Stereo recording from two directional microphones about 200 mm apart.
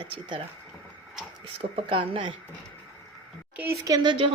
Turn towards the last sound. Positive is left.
turn(degrees=-25)  # may be behind; listen again after turning